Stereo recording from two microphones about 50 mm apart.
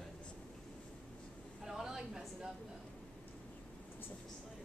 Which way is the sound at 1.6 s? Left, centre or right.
Centre.